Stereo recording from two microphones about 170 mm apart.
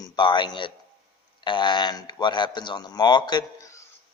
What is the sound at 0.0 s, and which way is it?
A man's voice, 25° left (ahead or behind).